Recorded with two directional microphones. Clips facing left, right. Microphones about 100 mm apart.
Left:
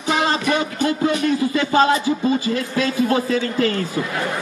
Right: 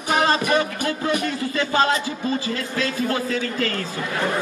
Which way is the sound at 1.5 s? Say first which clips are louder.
Left 2 dB; 15° left (ahead or behind).